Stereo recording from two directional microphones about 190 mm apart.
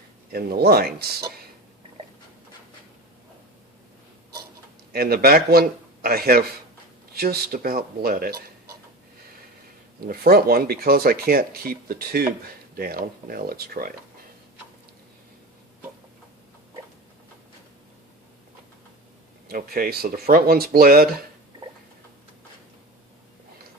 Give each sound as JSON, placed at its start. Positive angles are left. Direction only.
{"t": 0.3, "sound": "speech", "side_deg": -55}
{"t": 4.9, "sound": "speech", "side_deg": -55}
{"t": 10.1, "sound": "speech", "side_deg": -50}
{"t": 19.5, "sound": "speech", "side_deg": -50}